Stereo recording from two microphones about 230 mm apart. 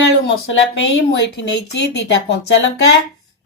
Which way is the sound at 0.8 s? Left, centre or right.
Left.